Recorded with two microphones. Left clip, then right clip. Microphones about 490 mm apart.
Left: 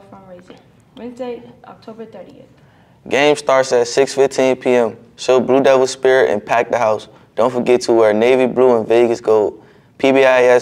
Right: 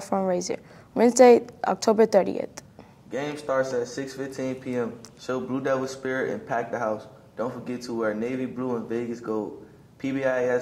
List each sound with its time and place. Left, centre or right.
0.9 s a woman's voice: right
3.3 s speech: left